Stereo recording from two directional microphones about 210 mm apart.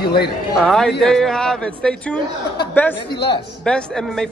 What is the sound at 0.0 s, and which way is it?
Speech, 50° left (ahead or behind).